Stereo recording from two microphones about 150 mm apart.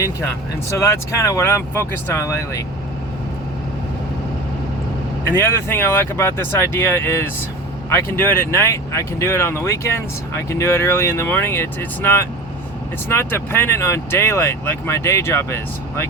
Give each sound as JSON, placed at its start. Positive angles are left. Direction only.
{"t": 0.7, "sound": "speech", "side_deg": 20}
{"t": 5.2, "sound": "speech", "side_deg": 15}